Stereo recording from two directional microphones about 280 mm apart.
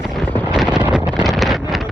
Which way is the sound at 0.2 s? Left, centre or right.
Centre.